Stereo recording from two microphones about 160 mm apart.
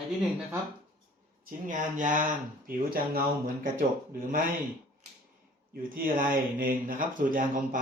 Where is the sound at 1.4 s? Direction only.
55° right (ahead or behind).